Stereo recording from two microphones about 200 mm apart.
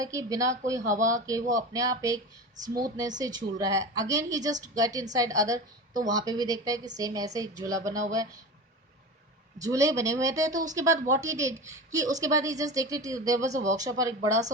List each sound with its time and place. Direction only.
0.0 s a woman's voice: 15° right (ahead or behind)
9.6 s a woman's voice: 15° right (ahead or behind)
13.5 s speech: 35° right (ahead or behind)
13.7 s a woman's voice: 15° right (ahead or behind)